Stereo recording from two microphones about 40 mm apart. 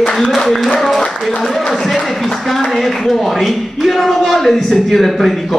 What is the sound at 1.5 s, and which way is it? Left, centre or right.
Speech, centre.